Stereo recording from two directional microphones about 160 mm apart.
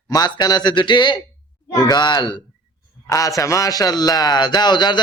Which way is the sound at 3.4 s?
20° left (ahead or behind).